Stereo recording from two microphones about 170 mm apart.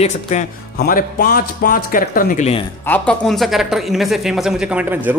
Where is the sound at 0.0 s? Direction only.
45° left (ahead or behind).